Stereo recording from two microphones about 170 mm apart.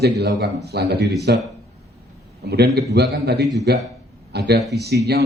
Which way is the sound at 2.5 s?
75° right (ahead or behind).